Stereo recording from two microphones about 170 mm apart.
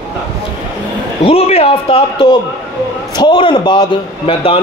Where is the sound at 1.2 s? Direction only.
35° left (ahead or behind).